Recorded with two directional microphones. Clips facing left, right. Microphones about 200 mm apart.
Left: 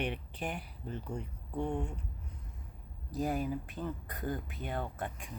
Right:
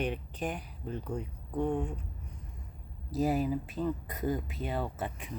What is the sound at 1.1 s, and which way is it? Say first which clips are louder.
Speech: right 4 dB; 5° right (ahead or behind).